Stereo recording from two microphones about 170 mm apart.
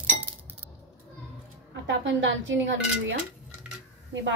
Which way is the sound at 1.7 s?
90° right.